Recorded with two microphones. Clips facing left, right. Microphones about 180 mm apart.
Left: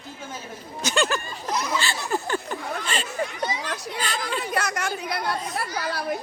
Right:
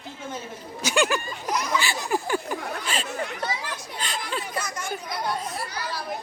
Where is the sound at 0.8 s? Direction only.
10° right (ahead or behind).